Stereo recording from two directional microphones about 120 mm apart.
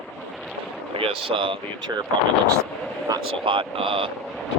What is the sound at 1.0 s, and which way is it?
Speech, 50° right (ahead or behind).